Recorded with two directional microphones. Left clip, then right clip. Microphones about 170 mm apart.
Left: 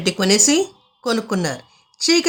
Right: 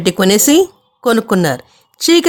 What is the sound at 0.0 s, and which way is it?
Speech, 55° right (ahead or behind).